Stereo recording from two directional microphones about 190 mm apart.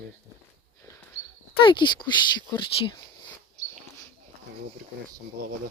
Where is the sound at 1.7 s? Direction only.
25° left (ahead or behind).